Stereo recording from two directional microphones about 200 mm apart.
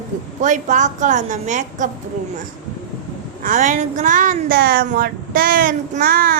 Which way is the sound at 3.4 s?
40° right (ahead or behind).